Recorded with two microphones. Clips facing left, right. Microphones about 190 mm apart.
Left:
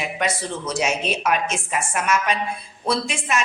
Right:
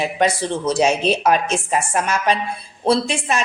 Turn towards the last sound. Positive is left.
turn(degrees=-35)  # may be behind; listen again after turning